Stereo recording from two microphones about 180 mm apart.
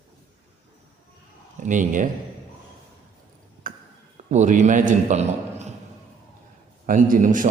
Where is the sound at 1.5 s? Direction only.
45° right (ahead or behind).